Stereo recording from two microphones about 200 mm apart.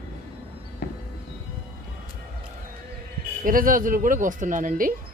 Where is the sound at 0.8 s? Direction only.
45° left (ahead or behind).